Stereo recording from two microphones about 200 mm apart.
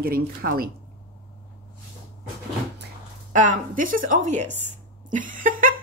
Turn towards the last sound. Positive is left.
turn(degrees=-45)  # may be behind; listen again after turning